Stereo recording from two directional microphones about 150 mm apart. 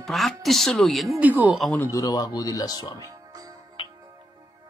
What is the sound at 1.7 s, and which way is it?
Speech, 25° left (ahead or behind).